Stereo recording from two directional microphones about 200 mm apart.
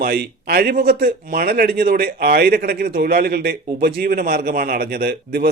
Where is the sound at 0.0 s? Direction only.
50° right (ahead or behind).